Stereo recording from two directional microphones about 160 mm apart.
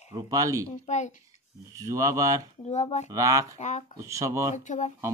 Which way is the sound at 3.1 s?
20° right (ahead or behind).